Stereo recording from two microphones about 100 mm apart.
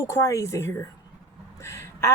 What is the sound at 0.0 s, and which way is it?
A woman's voice, 30° left (ahead or behind).